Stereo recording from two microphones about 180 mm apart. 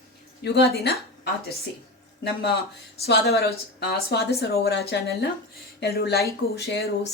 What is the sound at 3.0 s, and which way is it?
Speech, 60° left (ahead or behind).